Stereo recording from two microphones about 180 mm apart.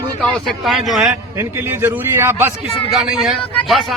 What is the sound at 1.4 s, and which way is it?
A man's voice, 10° right (ahead or behind).